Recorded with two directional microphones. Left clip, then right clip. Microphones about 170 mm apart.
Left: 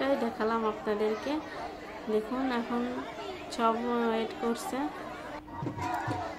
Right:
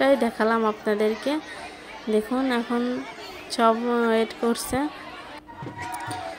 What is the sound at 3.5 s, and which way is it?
A woman's voice, 40° right (ahead or behind).